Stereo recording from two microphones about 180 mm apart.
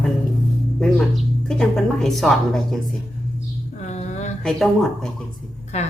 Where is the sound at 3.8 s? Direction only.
40° left (ahead or behind).